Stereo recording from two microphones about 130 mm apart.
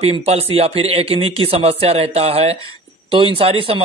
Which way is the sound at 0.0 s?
50° right (ahead or behind).